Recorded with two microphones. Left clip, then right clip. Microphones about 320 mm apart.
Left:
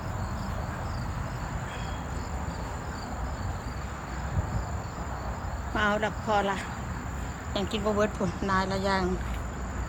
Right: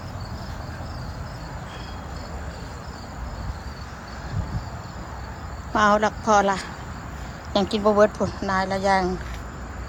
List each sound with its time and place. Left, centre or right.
5.7 s speech: centre